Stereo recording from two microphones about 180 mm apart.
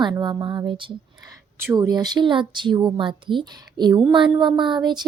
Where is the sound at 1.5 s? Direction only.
15° right (ahead or behind).